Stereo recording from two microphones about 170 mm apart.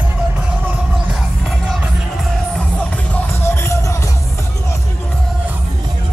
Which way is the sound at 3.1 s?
15° left (ahead or behind).